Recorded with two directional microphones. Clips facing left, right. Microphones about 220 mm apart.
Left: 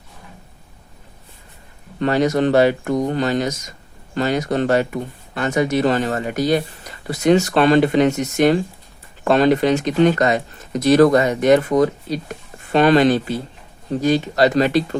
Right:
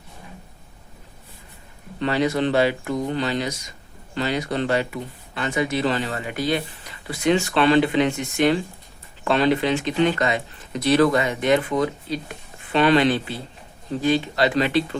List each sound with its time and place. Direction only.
2.0 s speech: 45° left (ahead or behind)